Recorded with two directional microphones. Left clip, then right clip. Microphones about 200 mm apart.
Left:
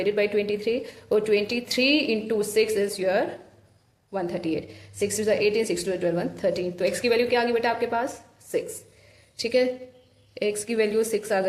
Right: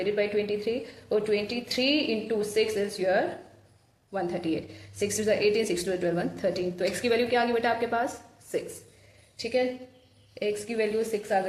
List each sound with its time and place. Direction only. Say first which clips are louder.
0.0 s a woman's voice: left 3 dB; 25° left (ahead or behind)
9.4 s a woman's voice: left 5 dB; 30° left (ahead or behind)